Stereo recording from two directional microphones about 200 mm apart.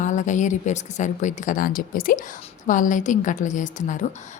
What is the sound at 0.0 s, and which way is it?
A woman's voice, 40° left (ahead or behind).